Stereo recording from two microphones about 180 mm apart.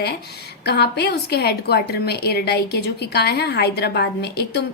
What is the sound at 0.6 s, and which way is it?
A woman's voice, 65° left (ahead or behind).